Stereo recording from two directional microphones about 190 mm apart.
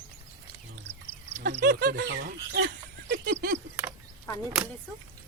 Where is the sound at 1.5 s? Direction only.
55° right (ahead or behind).